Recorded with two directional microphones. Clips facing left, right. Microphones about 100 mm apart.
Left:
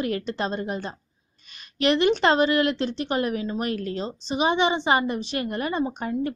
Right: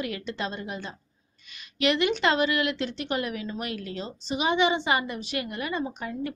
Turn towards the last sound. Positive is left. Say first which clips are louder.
# left 5 dB
turn(degrees=35)  # may be behind; listen again after turning